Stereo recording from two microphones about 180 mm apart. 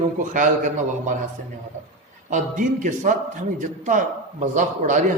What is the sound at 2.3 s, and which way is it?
A man's voice, 45° right (ahead or behind).